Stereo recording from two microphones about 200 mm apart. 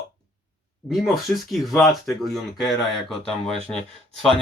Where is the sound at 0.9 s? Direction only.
Centre (ahead or behind).